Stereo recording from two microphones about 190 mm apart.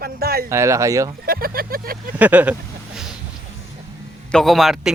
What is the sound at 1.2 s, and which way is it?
Speech, 50° right (ahead or behind).